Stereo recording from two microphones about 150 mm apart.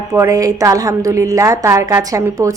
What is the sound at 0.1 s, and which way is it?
A woman's voice, 20° right (ahead or behind).